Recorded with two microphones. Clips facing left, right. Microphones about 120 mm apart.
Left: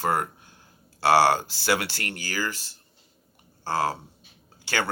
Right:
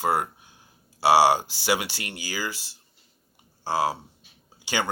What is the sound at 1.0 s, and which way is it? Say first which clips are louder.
Speech: right 1 dB; 15° right (ahead or behind).